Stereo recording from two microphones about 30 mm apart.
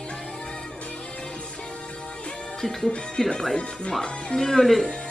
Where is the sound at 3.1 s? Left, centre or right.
Left.